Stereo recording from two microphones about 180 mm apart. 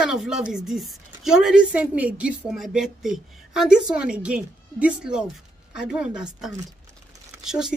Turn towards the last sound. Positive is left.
turn(degrees=-5)  # may be behind; listen again after turning